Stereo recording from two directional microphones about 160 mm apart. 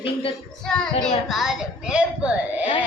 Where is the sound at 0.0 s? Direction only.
35° left (ahead or behind).